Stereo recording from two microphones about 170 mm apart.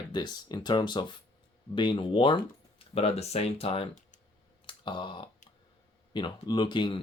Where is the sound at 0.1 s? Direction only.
25° left (ahead or behind).